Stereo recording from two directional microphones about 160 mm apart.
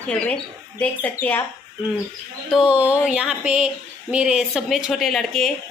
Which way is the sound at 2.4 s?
5° right (ahead or behind).